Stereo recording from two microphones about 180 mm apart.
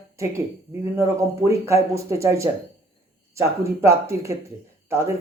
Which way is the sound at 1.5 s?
15° right (ahead or behind).